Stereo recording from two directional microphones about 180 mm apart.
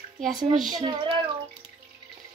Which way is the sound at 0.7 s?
25° right (ahead or behind).